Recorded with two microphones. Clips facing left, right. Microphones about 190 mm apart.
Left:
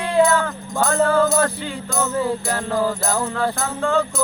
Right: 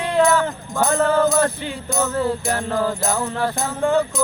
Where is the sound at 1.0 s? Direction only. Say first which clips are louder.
Even; 20° right (ahead or behind).